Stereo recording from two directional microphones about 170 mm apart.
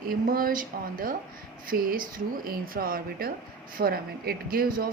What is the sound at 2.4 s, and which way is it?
Speech, 60° right (ahead or behind).